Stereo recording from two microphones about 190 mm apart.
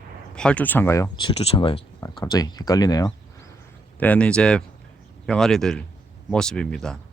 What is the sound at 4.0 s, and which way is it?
Speech, 5° left (ahead or behind).